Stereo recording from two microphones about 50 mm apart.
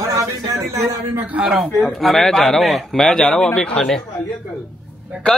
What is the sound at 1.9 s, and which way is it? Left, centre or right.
A man's voice, centre.